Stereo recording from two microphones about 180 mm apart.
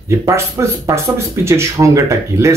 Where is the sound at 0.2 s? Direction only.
15° right (ahead or behind).